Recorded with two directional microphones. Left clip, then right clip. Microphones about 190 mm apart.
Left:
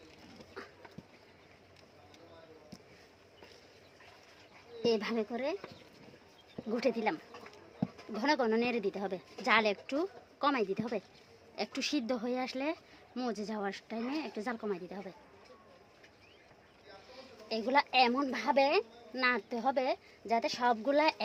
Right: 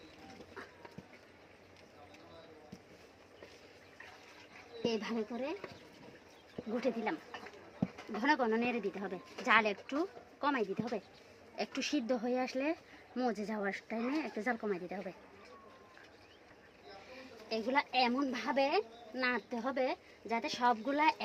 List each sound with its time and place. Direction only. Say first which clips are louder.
4.8 s speech: left 5 dB; 40° left (ahead or behind)
6.7 s speech: left 4 dB; 40° left (ahead or behind)
8.2 s speech: left 2 dB; 35° left (ahead or behind)
11.6 s speech: left 1 dB; 25° left (ahead or behind)
17.5 s a woman's voice: left 4 dB; 45° left (ahead or behind)